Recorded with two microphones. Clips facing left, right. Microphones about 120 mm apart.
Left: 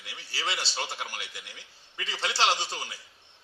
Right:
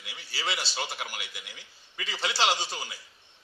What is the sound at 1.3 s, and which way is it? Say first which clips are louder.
A man's voice: even; 15° right (ahead or behind).